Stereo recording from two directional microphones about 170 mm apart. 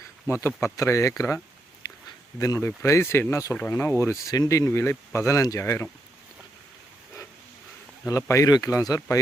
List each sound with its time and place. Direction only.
0.4 s speech: 15° left (ahead or behind)
2.4 s speech: 15° left (ahead or behind)
8.0 s speech: 20° left (ahead or behind)